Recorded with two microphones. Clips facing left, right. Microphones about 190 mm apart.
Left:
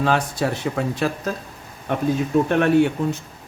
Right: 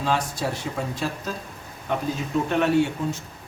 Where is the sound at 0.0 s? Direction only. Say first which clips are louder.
Left 4 dB; 60° left (ahead or behind).